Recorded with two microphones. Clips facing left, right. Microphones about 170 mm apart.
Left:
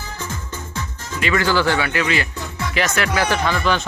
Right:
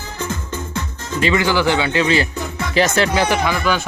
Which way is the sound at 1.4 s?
15° right (ahead or behind).